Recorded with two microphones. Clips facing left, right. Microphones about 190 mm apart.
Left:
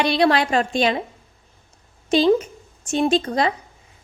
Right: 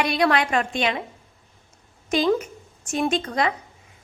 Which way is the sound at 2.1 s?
30° left (ahead or behind).